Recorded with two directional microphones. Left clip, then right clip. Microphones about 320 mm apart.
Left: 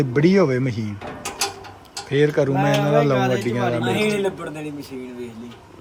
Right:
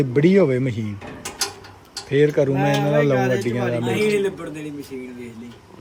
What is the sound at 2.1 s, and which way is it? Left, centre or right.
A man's voice, centre.